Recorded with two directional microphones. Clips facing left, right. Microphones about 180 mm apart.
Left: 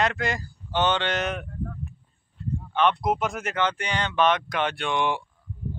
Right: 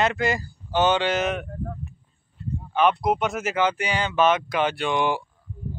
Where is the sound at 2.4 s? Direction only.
Centre (ahead or behind).